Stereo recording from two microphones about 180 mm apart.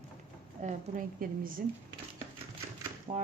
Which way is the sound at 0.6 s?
50° right (ahead or behind).